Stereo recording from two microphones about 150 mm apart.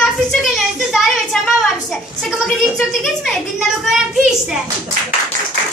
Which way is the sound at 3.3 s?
Centre (ahead or behind).